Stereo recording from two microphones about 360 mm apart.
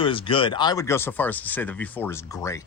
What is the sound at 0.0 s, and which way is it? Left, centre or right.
Speech, centre.